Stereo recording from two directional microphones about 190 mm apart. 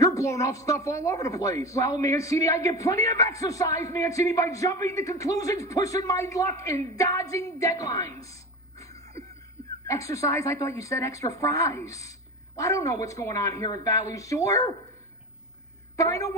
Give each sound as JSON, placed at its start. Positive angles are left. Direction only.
{"t": 0.0, "sound": "speech", "side_deg": 15}
{"t": 8.8, "sound": "a sound", "side_deg": 15}
{"t": 9.8, "sound": "speech", "side_deg": 15}
{"t": 16.0, "sound": "speech", "side_deg": 15}